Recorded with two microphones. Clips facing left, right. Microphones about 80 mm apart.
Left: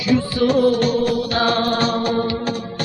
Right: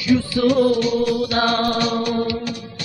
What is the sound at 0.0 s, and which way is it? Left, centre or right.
Music, left.